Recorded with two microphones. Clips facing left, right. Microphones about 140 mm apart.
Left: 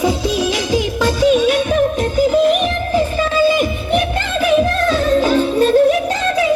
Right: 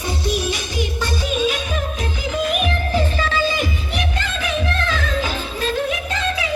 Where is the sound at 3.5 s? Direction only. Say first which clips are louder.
Left 8 dB; 50° left (ahead or behind).